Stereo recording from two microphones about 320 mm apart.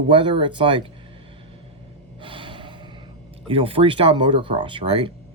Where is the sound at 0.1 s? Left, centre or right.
Centre.